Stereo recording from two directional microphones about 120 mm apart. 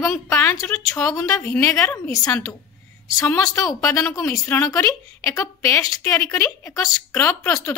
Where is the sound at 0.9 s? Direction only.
25° left (ahead or behind).